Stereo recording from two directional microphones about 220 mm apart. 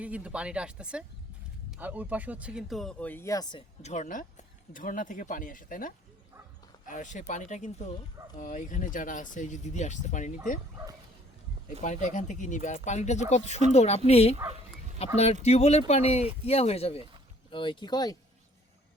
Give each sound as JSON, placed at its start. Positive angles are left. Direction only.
{"t": 0.0, "sound": "speech", "side_deg": -5}
{"t": 3.8, "sound": "speech", "side_deg": 35}
{"t": 11.8, "sound": "speech", "side_deg": 35}